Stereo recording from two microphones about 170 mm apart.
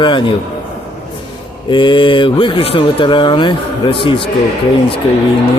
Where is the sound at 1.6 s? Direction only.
30° left (ahead or behind).